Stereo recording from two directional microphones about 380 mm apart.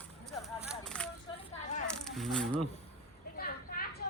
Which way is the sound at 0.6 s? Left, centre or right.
Centre.